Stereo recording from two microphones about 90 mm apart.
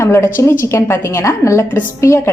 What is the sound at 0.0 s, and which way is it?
A woman's voice, 30° left (ahead or behind).